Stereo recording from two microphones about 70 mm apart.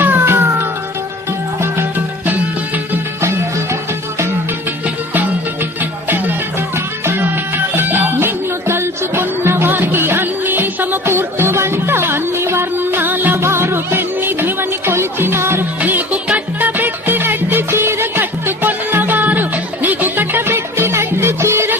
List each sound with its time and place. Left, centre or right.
0.0 s music: right
3.2 s music: right
5.8 s music: right
15.8 s music: right